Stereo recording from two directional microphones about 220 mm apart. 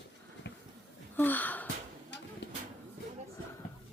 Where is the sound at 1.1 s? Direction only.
10° left (ahead or behind).